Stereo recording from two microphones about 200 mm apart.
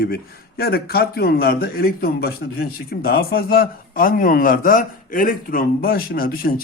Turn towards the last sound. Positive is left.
turn(degrees=45)  # may be behind; listen again after turning